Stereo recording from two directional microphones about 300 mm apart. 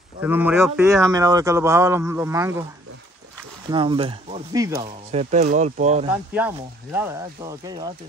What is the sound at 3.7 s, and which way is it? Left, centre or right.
Speech, centre.